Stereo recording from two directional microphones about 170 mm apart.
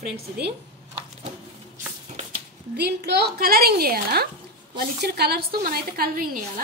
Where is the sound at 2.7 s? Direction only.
80° right.